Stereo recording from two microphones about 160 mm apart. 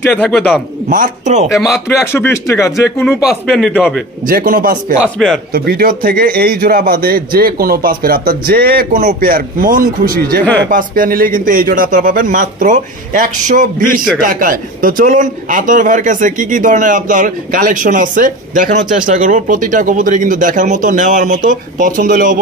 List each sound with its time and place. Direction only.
0.0 s speech: 10° left (ahead or behind)
0.8 s speech: 55° right (ahead or behind)
1.6 s speech: 15° left (ahead or behind)
3.3 s speech: 5° left (ahead or behind)
4.3 s a man's voice: 60° right (ahead or behind)